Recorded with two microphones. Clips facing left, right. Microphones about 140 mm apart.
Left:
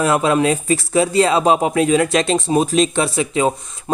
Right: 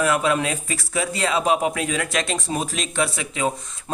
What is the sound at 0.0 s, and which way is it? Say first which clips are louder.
Speech: left 5 dB; 30° left (ahead or behind).